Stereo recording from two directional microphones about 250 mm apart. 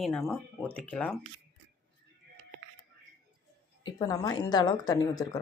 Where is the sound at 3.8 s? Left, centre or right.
Centre.